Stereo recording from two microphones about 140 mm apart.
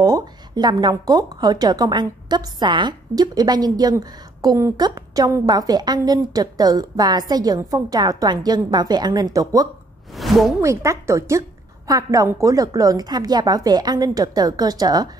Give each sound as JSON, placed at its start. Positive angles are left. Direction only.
{"t": 0.0, "sound": "a woman's voice", "side_deg": -30}
{"t": 10.1, "sound": "speech", "side_deg": 0}
{"t": 10.6, "sound": "a woman's voice", "side_deg": -20}